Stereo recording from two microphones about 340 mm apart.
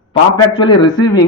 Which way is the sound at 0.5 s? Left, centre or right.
Centre.